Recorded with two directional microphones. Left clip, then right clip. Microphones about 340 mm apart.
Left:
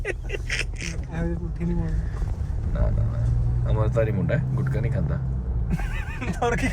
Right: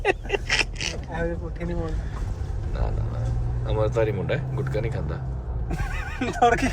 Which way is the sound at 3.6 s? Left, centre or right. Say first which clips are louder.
Right 2 dB; centre.